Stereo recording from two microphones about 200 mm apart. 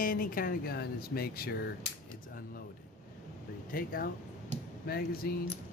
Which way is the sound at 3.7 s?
45° left (ahead or behind).